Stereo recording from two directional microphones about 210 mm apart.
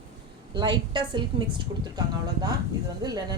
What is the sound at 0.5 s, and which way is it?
Speech, 20° right (ahead or behind).